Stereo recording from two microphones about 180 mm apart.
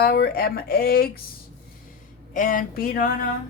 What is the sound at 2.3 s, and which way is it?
Speech, 50° left (ahead or behind).